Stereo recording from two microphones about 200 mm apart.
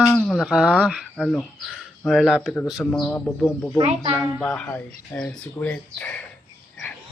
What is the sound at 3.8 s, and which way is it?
Speech, 25° right (ahead or behind).